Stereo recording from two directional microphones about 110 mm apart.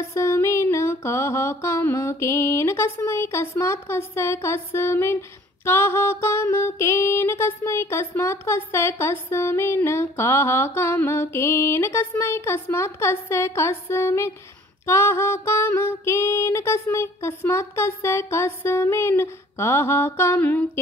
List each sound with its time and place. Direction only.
0.0 s music: 25° left (ahead or behind)